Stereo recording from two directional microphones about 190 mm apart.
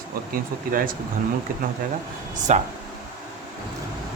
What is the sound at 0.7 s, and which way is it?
Speech, 45° right (ahead or behind).